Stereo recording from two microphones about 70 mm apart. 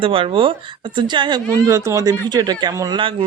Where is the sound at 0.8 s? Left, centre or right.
Right.